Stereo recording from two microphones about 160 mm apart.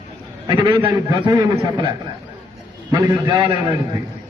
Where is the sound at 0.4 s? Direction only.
30° right (ahead or behind).